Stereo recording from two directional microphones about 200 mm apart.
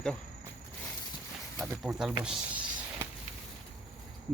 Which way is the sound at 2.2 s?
5° right (ahead or behind).